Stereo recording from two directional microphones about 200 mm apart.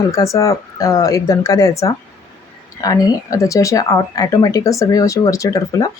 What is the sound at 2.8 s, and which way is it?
Speech, 20° left (ahead or behind).